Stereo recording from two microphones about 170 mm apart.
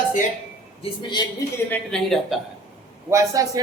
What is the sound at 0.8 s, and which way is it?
Speech, 25° left (ahead or behind).